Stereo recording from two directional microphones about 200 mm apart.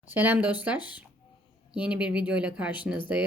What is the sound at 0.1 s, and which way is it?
Speech, 10° right (ahead or behind).